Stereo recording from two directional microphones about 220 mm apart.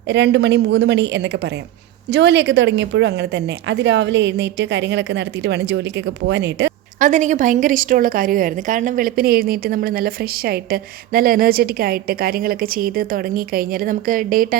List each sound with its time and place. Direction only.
0.1 s speech: 50° right (ahead or behind)
7.0 s a woman's voice: 35° right (ahead or behind)